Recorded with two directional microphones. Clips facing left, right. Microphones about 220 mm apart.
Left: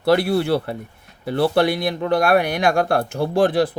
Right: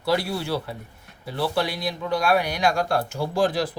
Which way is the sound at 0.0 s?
65° left (ahead or behind).